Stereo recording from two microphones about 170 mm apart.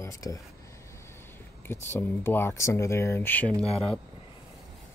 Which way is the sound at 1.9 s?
15° left (ahead or behind).